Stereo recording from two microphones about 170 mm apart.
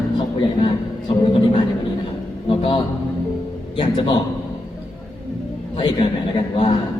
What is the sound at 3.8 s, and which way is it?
Speech, 30° left (ahead or behind).